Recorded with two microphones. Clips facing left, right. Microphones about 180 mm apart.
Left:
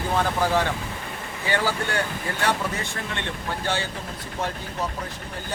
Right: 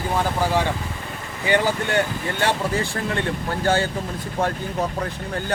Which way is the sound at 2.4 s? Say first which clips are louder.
Right 4 dB; 30° right (ahead or behind).